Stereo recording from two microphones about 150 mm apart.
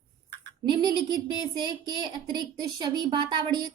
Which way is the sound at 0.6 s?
30° right (ahead or behind).